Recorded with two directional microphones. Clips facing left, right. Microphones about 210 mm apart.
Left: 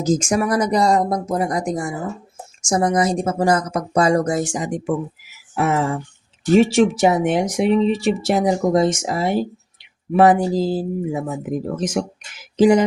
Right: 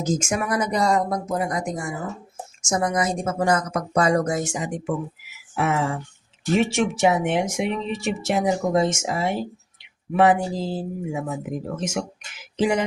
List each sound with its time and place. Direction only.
0.0 s speech: 35° left (ahead or behind)
12.5 s music: 35° left (ahead or behind)